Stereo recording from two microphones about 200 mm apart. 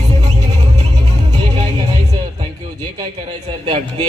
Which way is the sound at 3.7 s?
30° right (ahead or behind).